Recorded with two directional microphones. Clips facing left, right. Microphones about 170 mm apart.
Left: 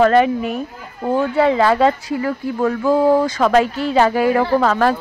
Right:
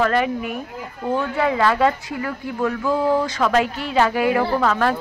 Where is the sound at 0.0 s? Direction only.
30° left (ahead or behind).